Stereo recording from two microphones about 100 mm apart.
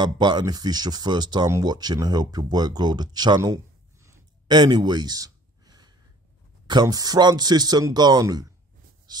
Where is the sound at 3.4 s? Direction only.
30° right (ahead or behind).